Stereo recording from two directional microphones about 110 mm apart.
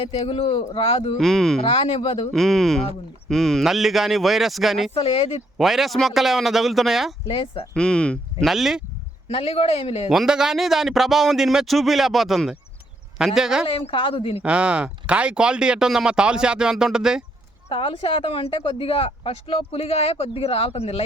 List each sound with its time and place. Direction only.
0.0 s speech: 60° left (ahead or behind)
1.2 s speech: 5° left (ahead or behind)
1.6 s speech: 55° left (ahead or behind)
2.3 s speech: centre (ahead or behind)
4.9 s speech: 60° left (ahead or behind)
5.5 s speech: centre (ahead or behind)
7.3 s speech: 55° left (ahead or behind)
7.7 s speech: 10° left (ahead or behind)
8.4 s speech: centre (ahead or behind)
9.3 s speech: 60° left (ahead or behind)
10.1 s speech: 5° right (ahead or behind)
13.7 s speech: 55° left (ahead or behind)
14.4 s speech: 10° right (ahead or behind)
17.7 s speech: 55° left (ahead or behind)